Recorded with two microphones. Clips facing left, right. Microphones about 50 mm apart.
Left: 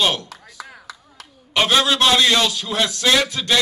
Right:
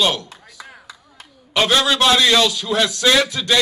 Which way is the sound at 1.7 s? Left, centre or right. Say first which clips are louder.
Even; left.